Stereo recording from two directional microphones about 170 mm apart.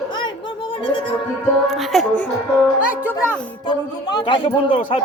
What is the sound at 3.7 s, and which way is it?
A man's voice, 25° left (ahead or behind).